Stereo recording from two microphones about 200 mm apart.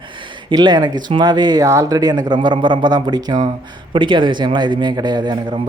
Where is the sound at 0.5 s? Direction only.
20° right (ahead or behind).